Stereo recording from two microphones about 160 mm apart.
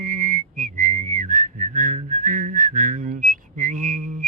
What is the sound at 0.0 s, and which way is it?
Whistling, 55° right (ahead or behind).